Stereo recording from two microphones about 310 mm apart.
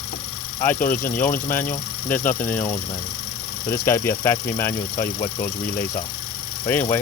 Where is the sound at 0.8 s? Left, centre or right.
Left.